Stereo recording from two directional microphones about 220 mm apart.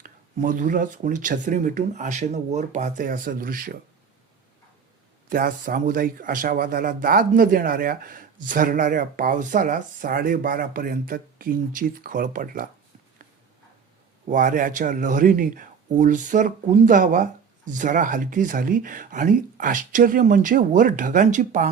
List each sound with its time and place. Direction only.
0.0 s speech: 35° right (ahead or behind)
5.3 s speech: 40° right (ahead or behind)
14.3 s speech: 40° right (ahead or behind)